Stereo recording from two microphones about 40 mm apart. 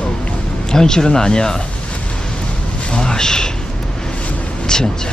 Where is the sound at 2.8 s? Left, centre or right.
Centre.